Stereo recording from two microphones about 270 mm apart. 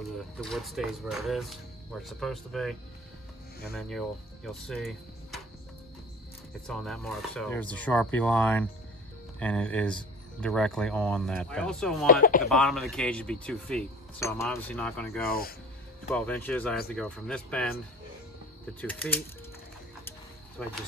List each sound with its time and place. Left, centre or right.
0.4 s speech: centre
4.5 s speech: centre
6.7 s speech: centre
12.1 s speech: left
12.4 s speech: centre
15.2 s speech: left
16.1 s speech: centre
18.8 s speech: centre
20.6 s speech: centre